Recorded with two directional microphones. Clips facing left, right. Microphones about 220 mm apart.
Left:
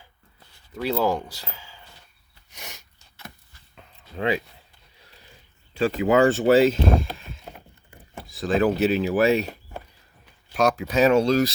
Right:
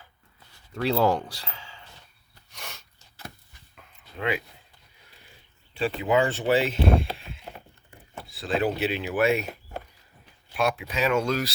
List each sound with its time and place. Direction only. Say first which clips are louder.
0.7 s speech: right 1 dB; 5° left (ahead or behind)
2.5 s snort: even; 15° left (ahead or behind)
3.8 s a sound: left 5 dB; 30° left (ahead or behind)
5.7 s speech: left 4 dB; 45° left (ahead or behind)
10.5 s speech: left 5 dB; 40° left (ahead or behind)